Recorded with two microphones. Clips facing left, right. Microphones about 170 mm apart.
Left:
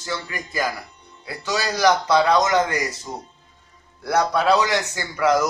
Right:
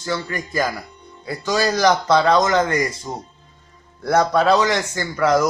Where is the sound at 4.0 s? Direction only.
50° right (ahead or behind).